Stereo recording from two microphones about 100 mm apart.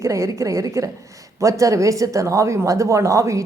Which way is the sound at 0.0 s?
30° right (ahead or behind).